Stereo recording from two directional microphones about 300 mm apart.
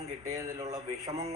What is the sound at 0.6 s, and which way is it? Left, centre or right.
Speech, right.